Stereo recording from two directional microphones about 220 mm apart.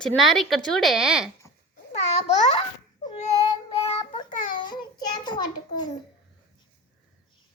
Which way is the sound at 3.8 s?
25° left (ahead or behind).